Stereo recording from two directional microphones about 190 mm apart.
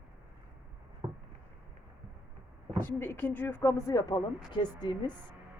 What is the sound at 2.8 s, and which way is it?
A woman's voice, 10° left (ahead or behind).